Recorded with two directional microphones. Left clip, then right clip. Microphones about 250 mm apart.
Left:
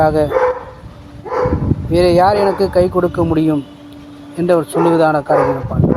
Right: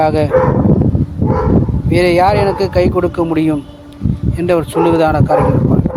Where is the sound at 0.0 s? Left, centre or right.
Centre.